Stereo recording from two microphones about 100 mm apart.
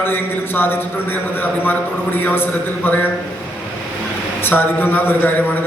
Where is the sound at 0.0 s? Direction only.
20° left (ahead or behind).